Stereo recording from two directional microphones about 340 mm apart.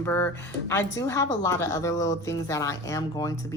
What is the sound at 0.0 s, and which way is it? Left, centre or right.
Speech, centre.